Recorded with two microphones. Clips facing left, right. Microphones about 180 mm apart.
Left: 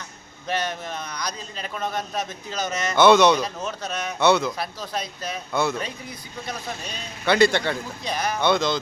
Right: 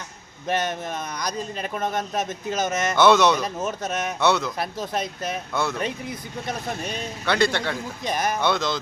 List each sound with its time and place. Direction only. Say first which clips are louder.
0.4 s speech: right 2 dB; 50° right (ahead or behind)
3.0 s speech: left 2 dB; centre (ahead or behind)
3.4 s speech: right 2 dB; 50° right (ahead or behind)
4.2 s speech: left 3 dB; centre (ahead or behind)
4.5 s speech: right 3 dB; 50° right (ahead or behind)
7.3 s speech: left 4 dB; centre (ahead or behind)
8.0 s speech: right 2 dB; 45° right (ahead or behind)
8.4 s speech: left 2 dB; centre (ahead or behind)